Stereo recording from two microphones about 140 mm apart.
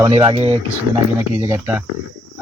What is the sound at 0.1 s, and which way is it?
Speech, 45° right (ahead or behind).